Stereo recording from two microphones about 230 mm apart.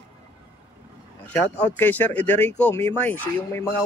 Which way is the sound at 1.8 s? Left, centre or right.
Centre.